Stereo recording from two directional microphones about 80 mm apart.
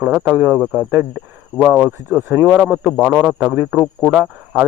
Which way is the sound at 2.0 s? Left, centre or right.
Right.